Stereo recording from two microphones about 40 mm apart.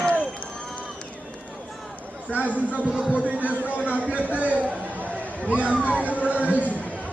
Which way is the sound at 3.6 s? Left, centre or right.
Left.